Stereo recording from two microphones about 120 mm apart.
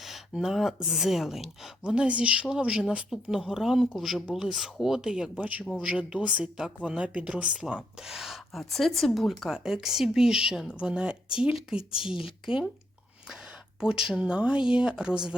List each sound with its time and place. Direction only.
0.0 s speech: centre (ahead or behind)
13.7 s speech: 5° right (ahead or behind)